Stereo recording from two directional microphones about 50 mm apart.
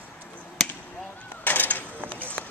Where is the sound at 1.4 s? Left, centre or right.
Left.